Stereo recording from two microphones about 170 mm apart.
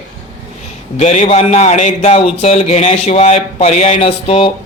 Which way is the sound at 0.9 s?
40° left (ahead or behind).